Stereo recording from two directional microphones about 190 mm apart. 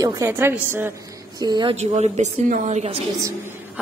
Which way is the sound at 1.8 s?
35° right (ahead or behind).